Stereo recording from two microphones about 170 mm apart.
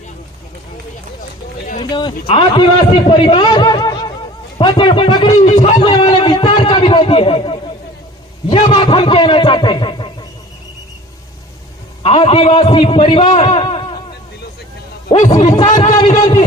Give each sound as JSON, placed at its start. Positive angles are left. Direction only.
{"t": 1.8, "sound": "a man's voice", "side_deg": 25}
{"t": 5.4, "sound": "a man's voice", "side_deg": 40}
{"t": 5.9, "sound": "a man's voice", "side_deg": 25}
{"t": 12.0, "sound": "a man's voice", "side_deg": 35}
{"t": 13.2, "sound": "a sound", "side_deg": 40}
{"t": 15.1, "sound": "a man's voice", "side_deg": 40}
{"t": 15.4, "sound": "a man's voice", "side_deg": 25}
{"t": 15.7, "sound": "a man's voice", "side_deg": 45}